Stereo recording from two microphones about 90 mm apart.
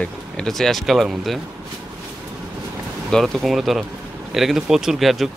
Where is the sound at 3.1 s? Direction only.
Centre (ahead or behind).